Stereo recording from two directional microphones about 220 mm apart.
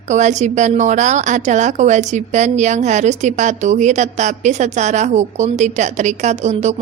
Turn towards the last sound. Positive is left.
turn(degrees=-30)  # may be behind; listen again after turning